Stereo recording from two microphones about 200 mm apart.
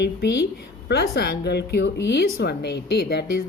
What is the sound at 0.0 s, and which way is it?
A woman's voice, 60° left (ahead or behind).